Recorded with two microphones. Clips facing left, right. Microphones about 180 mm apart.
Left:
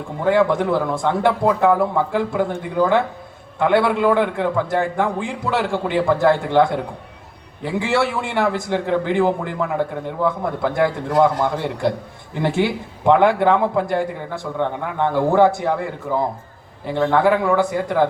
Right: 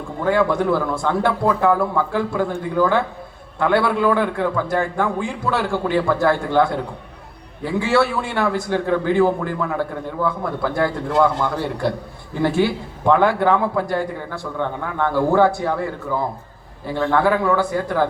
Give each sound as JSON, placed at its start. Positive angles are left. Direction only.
{"t": 0.3, "sound": "a man's voice", "side_deg": 20}